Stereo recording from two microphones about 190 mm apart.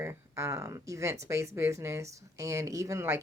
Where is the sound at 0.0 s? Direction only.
15° right (ahead or behind).